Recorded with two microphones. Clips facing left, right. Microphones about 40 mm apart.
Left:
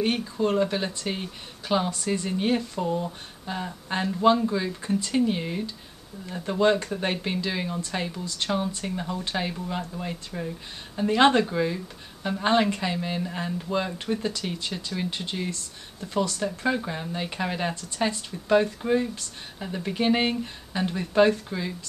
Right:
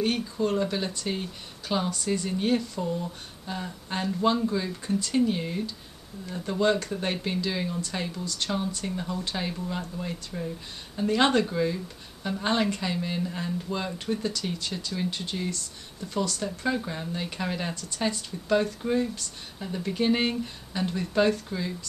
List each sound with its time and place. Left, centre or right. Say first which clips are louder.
0.0 s speech: left 2 dB; left
8.3 s speech: left 3 dB; left